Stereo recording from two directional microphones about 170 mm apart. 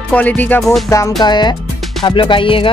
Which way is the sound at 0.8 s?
20° left (ahead or behind).